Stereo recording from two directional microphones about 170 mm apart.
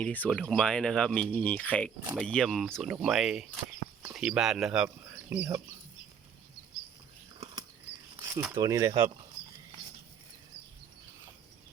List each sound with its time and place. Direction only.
0.0 s speech: 10° left (ahead or behind); by 5.6 s 10° right (ahead or behind)
8.2 s speech: 10° right (ahead or behind)